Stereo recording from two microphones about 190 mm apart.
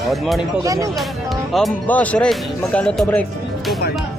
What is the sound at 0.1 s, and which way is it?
Speech, centre (ahead or behind).